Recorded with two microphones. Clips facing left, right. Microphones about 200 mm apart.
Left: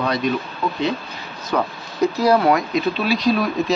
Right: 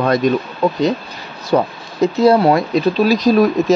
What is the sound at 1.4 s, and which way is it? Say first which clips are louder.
Speech: right 6 dB; 25° right (ahead or behind).